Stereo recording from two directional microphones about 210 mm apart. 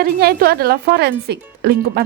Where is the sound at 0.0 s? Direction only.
45° right (ahead or behind).